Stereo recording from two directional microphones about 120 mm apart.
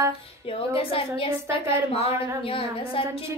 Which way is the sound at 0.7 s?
50° left (ahead or behind).